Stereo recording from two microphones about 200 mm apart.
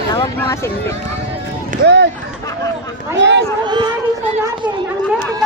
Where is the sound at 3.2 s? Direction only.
60° right (ahead or behind).